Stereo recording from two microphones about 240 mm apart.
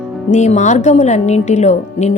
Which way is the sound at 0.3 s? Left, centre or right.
Left.